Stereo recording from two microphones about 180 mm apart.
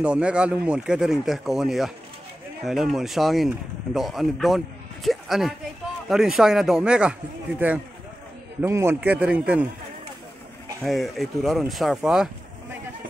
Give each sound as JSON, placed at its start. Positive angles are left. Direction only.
{"t": 0.0, "sound": "a man's voice", "side_deg": -5}
{"t": 10.8, "sound": "speech", "side_deg": 0}